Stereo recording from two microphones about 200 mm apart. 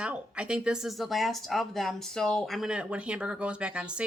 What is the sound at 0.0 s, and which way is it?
Speech, 5° right (ahead or behind).